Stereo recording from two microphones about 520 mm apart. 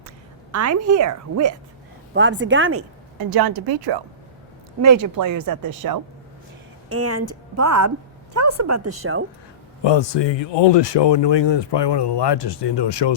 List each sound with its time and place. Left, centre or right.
0.5 s speech: right
2.1 s a woman's voice: right
3.2 s speech: right
4.8 s a woman's voice: right
9.8 s speech: left